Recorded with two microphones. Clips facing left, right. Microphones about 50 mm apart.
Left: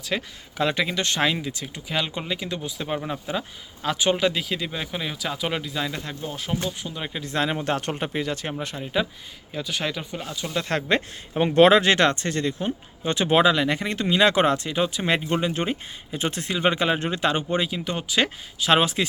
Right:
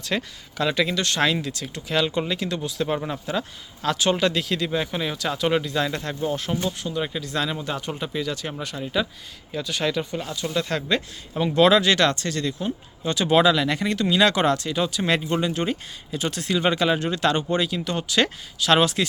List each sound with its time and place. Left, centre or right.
0.0 s speech: centre
3.8 s speech: centre
6.8 s speech: centre
7.2 s speech: left
7.6 s speech: left
7.9 s speech: left
8.9 s speech: centre
10.7 s speech: left; by 19.0 s centre